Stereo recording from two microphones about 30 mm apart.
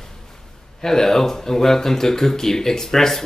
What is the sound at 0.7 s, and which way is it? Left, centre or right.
Speech, centre.